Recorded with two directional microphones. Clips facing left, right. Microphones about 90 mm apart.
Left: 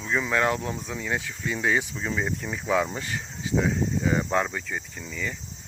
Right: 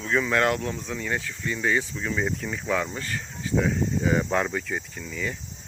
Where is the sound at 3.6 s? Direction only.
5° left (ahead or behind).